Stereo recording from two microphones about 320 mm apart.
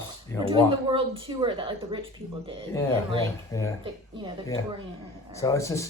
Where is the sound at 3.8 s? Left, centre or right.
Centre.